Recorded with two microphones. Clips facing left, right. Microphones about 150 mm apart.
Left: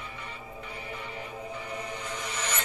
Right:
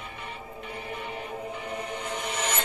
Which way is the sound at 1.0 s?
55° right (ahead or behind).